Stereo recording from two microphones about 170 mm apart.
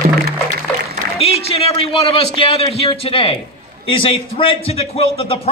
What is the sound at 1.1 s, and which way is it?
A woman's voice, 35° left (ahead or behind).